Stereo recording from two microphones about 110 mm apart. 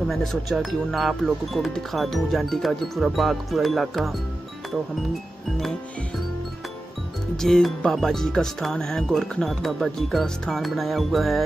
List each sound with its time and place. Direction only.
0.1 s speech: centre (ahead or behind)
7.3 s speech: 5° left (ahead or behind)